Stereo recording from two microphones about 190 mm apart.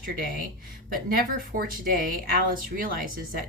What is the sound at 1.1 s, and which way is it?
Speech, 50° right (ahead or behind).